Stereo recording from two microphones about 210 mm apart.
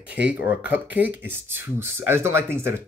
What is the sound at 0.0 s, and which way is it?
Speech, 5° right (ahead or behind).